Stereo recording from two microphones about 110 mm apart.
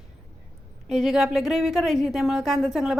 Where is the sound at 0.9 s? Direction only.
Centre (ahead or behind).